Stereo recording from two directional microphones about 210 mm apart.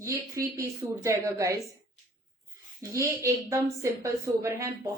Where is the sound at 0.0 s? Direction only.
15° right (ahead or behind).